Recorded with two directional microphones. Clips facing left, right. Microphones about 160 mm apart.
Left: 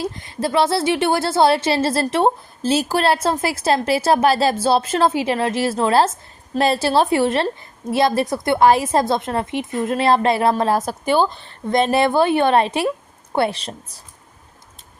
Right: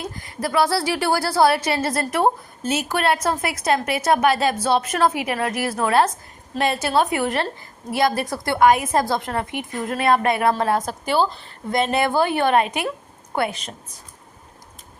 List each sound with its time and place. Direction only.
0.0 s a woman's voice: 25° left (ahead or behind)